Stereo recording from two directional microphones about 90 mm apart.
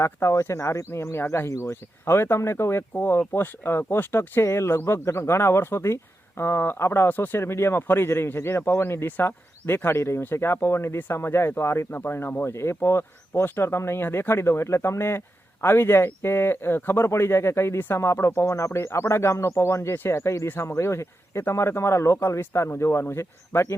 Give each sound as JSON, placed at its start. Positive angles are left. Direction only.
{"t": 0.0, "sound": "speech", "side_deg": 30}